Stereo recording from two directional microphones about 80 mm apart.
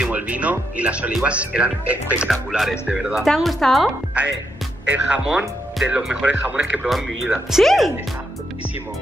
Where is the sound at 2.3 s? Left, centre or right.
Centre.